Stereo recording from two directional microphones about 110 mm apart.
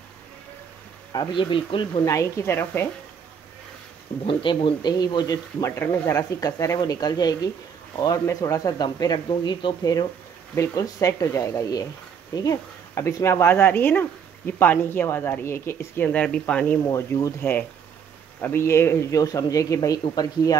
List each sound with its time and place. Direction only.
1.1 s speech: 40° left (ahead or behind)
2.0 s speech: 25° left (ahead or behind)
4.3 s speech: 50° left (ahead or behind); by 5.7 s 35° left (ahead or behind)
5.8 s speech: 20° left (ahead or behind); by 9.2 s 40° left (ahead or behind)
9.3 s speech: 50° left (ahead or behind)
10.5 s speech: 30° left (ahead or behind)
16.1 s speech: 10° left (ahead or behind)
16.8 s speech: 25° left (ahead or behind)